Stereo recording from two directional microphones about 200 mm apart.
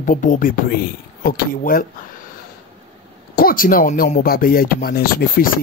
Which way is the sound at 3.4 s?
45° left (ahead or behind).